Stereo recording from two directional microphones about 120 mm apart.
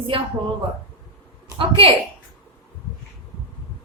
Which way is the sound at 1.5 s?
50° right (ahead or behind).